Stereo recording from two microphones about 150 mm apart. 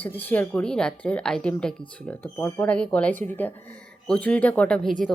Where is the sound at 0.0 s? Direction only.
10° left (ahead or behind).